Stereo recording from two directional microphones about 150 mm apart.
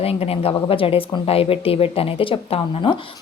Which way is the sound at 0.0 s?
40° left (ahead or behind).